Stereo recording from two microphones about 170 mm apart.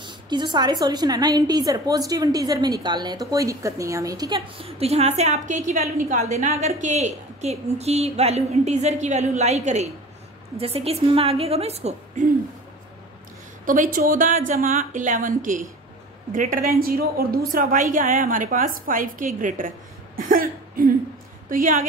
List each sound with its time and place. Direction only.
0.0 s a woman's voice: 25° right (ahead or behind)
13.7 s a woman's voice: 50° right (ahead or behind)
20.2 s cough: 55° right (ahead or behind)
21.5 s a woman's voice: 55° right (ahead or behind)